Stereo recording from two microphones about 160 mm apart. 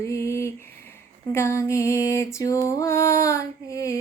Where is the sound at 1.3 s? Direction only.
15° left (ahead or behind).